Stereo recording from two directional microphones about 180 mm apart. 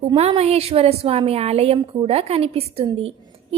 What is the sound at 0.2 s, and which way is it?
A woman's voice, 35° right (ahead or behind).